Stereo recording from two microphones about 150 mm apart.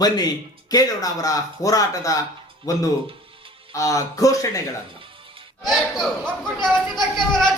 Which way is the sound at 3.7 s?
20° left (ahead or behind).